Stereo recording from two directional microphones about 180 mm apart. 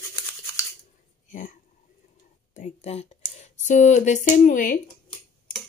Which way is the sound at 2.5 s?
35° left (ahead or behind).